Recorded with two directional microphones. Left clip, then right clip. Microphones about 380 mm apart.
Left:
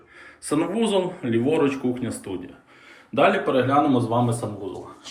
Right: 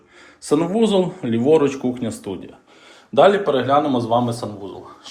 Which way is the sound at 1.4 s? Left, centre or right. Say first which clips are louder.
Right 7 dB; right.